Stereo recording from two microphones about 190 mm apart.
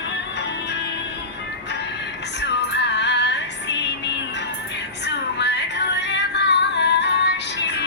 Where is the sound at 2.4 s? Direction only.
65° left (ahead or behind).